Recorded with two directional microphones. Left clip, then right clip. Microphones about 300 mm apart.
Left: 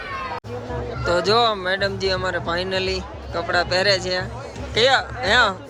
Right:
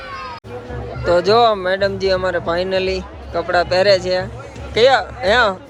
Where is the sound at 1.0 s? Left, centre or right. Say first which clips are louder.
Right 5 dB; centre.